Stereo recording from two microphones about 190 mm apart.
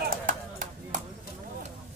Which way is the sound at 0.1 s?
45° right (ahead or behind).